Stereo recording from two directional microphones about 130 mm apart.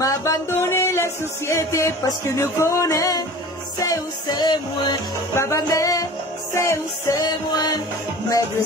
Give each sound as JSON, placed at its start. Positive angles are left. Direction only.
{"t": 0.0, "sound": "music", "side_deg": 25}
{"t": 5.3, "sound": "music", "side_deg": 20}